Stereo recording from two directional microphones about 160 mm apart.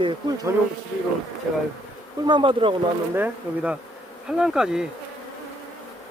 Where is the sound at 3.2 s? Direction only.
10° right (ahead or behind).